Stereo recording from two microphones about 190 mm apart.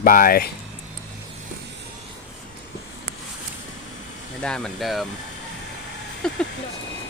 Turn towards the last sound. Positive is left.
turn(degrees=5)  # may be behind; listen again after turning